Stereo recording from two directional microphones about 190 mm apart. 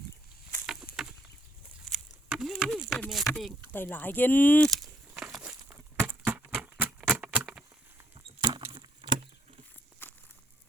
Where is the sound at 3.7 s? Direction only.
10° left (ahead or behind); by 7.5 s 5° right (ahead or behind).